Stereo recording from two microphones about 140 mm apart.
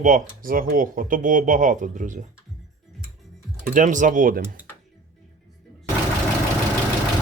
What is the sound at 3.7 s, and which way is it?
Speech, 65° right (ahead or behind).